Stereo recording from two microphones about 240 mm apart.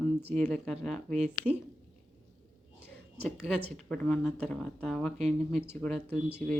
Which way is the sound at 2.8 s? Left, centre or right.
Centre.